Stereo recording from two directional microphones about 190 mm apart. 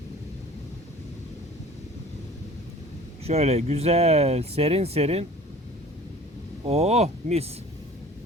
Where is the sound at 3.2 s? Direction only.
35° right (ahead or behind).